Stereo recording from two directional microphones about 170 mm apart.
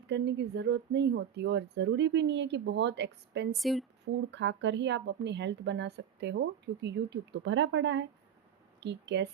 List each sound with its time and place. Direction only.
0.1 s a woman's voice: 90° right
3.5 s speech: centre (ahead or behind)
4.0 s a woman's voice: 90° right